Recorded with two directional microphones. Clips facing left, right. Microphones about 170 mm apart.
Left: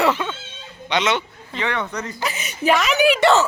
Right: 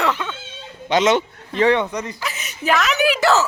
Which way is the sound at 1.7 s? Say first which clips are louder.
Right 4 dB; 15° right (ahead or behind).